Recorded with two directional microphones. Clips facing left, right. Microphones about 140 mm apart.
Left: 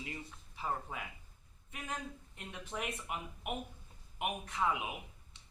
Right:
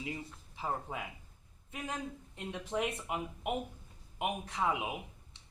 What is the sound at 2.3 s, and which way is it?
Speech, 25° right (ahead or behind).